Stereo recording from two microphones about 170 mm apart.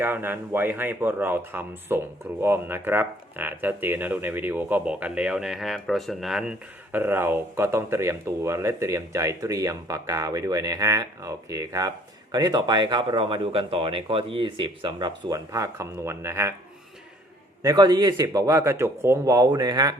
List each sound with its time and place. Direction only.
0.0 s speech: 10° right (ahead or behind)
17.6 s speech: 20° right (ahead or behind)